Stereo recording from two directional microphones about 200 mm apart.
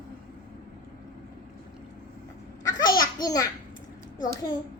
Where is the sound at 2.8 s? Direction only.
20° left (ahead or behind).